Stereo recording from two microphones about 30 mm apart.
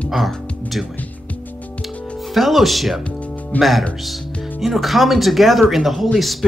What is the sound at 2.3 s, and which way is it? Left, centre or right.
Speech, centre.